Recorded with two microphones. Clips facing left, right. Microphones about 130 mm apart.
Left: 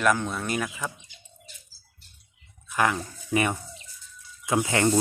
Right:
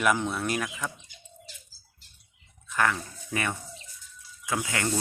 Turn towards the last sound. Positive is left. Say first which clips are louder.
# left 7 dB
turn(degrees=25)  # may be behind; listen again after turning